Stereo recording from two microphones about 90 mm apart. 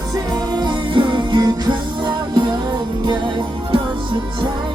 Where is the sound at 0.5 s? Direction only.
60° right (ahead or behind).